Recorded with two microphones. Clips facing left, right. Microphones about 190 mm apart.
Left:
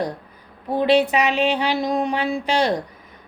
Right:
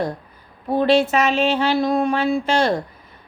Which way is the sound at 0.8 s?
15° left (ahead or behind).